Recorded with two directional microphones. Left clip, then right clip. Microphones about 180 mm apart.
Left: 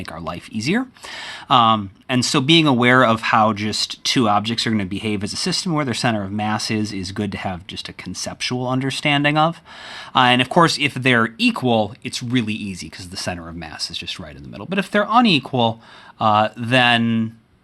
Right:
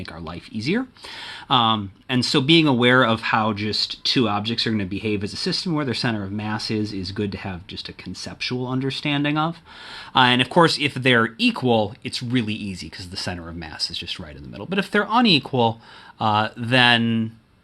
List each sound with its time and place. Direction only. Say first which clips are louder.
0.0 s speech: left 5 dB; 35° left (ahead or behind)
10.1 s speech: left 2 dB; 20° left (ahead or behind)